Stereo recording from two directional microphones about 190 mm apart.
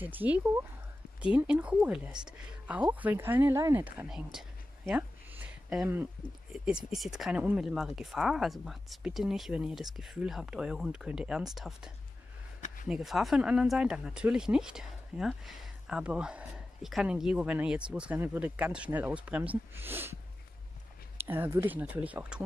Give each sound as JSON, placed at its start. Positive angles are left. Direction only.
{"t": 0.0, "sound": "speech", "side_deg": -10}
{"t": 21.2, "sound": "speech", "side_deg": -10}